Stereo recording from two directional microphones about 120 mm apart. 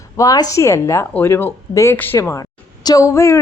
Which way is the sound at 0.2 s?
30° left (ahead or behind).